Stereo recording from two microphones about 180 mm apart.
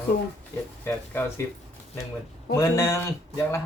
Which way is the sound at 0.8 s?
15° left (ahead or behind).